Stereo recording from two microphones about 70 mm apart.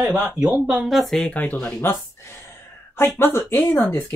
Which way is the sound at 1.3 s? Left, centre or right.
Left.